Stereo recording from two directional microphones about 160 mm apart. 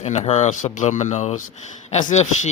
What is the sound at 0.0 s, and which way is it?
A man's voice, 45° left (ahead or behind).